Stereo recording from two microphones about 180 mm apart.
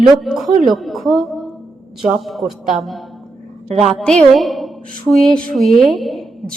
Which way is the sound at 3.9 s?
5° left (ahead or behind).